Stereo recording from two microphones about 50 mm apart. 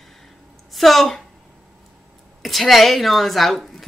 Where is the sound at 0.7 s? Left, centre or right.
Centre.